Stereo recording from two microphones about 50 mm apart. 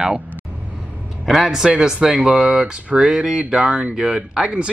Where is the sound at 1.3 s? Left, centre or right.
Centre.